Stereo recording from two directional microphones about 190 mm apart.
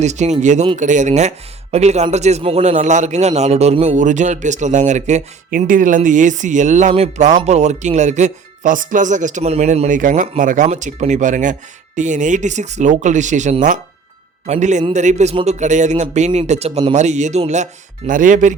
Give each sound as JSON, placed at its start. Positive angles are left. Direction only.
{"t": 0.0, "sound": "a man's voice", "side_deg": -35}